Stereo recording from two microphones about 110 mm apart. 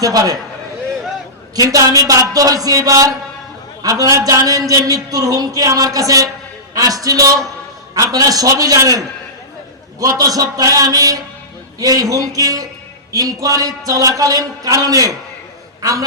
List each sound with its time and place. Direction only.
0.0 s a man's voice: 35° right (ahead or behind)
1.5 s a man's voice: 35° right (ahead or behind)